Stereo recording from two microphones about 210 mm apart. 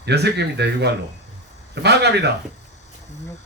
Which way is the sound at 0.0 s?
50° right (ahead or behind).